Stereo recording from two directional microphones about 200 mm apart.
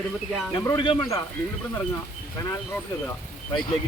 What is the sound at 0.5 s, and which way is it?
Speech, 20° left (ahead or behind).